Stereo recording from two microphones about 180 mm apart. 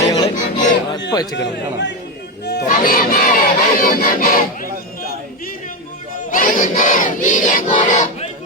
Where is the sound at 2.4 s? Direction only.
65° left (ahead or behind).